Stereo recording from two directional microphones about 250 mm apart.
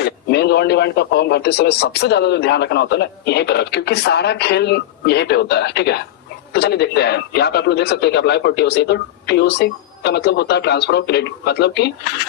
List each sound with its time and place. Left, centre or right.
0.0 s a man's voice: left